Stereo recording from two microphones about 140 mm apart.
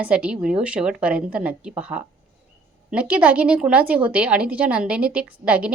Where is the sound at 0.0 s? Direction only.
10° right (ahead or behind).